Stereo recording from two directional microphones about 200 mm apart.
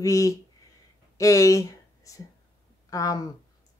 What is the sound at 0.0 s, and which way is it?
Speech, 15° left (ahead or behind).